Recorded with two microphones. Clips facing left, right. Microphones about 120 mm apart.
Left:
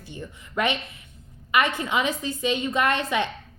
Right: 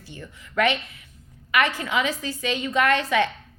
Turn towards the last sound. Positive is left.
turn(degrees=20)  # may be behind; listen again after turning